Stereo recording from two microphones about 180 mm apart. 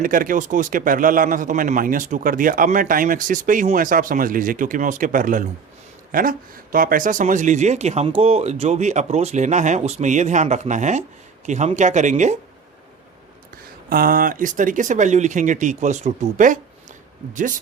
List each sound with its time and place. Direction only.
0.0 s a man's voice: 50° right (ahead or behind)
13.9 s a man's voice: 55° right (ahead or behind)